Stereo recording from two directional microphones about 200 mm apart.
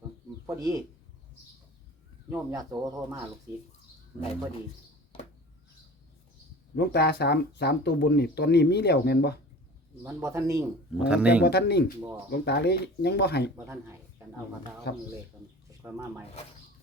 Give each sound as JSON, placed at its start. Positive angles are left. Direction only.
{"t": 0.4, "sound": "speech", "side_deg": -15}
{"t": 2.3, "sound": "speech", "side_deg": -15}
{"t": 6.7, "sound": "speech", "side_deg": 55}
{"t": 10.0, "sound": "speech", "side_deg": -15}
{"t": 11.4, "sound": "speech", "side_deg": 55}
{"t": 15.8, "sound": "speech", "side_deg": -10}